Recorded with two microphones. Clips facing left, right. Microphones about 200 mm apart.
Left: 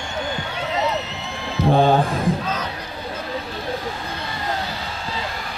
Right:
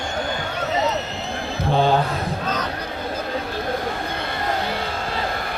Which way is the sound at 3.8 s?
55° right (ahead or behind).